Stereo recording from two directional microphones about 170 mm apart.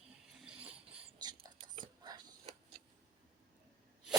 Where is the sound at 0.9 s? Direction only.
30° right (ahead or behind).